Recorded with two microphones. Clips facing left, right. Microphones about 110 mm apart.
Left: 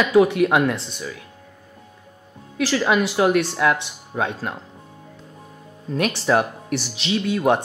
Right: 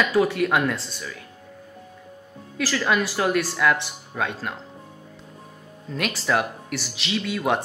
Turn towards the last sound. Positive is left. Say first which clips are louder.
# left 5 dB
turn(degrees=25)  # may be behind; listen again after turning